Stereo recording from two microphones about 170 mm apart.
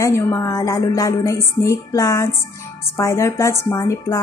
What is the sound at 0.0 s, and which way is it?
Music, 20° left (ahead or behind).